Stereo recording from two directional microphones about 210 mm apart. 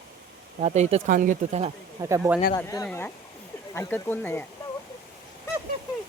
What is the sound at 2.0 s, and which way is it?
Speech, 10° right (ahead or behind).